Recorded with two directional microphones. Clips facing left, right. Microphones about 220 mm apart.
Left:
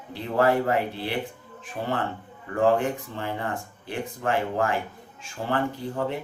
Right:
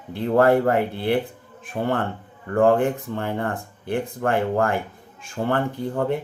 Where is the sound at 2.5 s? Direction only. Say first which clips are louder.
Right 4 dB; 55° right (ahead or behind).